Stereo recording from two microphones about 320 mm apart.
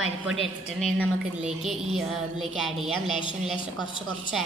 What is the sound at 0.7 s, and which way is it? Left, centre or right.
A woman's voice, centre.